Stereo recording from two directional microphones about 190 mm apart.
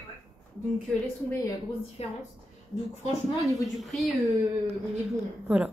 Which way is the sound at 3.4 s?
Centre (ahead or behind).